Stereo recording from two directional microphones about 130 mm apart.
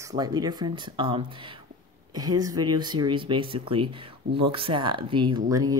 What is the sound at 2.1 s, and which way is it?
Speech, 30° right (ahead or behind).